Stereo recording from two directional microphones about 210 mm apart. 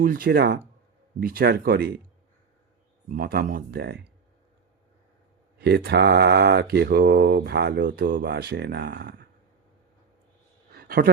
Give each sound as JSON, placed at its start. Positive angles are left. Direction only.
{"t": 0.0, "sound": "speech", "side_deg": -40}
{"t": 3.1, "sound": "speech", "side_deg": -45}
{"t": 5.5, "sound": "speech", "side_deg": -50}
{"t": 8.2, "sound": "speech", "side_deg": -55}
{"t": 10.7, "sound": "a sound", "side_deg": -45}